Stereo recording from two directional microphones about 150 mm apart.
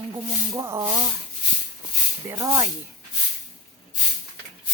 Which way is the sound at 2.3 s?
20° right (ahead or behind).